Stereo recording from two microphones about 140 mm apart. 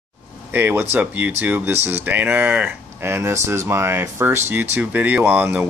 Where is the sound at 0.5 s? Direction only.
15° right (ahead or behind).